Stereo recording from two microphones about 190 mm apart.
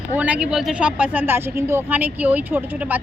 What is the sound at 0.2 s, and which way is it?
Speech, 5° right (ahead or behind).